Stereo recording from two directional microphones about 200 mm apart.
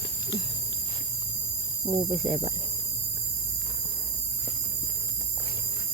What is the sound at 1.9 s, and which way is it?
Speech, 35° right (ahead or behind).